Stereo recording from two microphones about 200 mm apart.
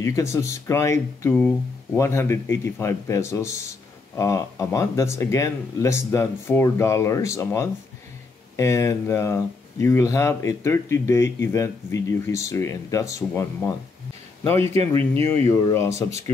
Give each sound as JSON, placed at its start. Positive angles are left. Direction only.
{"t": 0.0, "sound": "speech", "side_deg": 15}
{"t": 14.8, "sound": "speech", "side_deg": -30}
{"t": 15.4, "sound": "speech", "side_deg": 15}